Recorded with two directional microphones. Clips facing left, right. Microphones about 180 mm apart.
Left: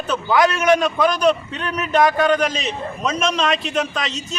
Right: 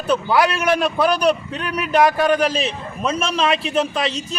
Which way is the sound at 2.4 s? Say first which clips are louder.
Right 2 dB; 35° right (ahead or behind).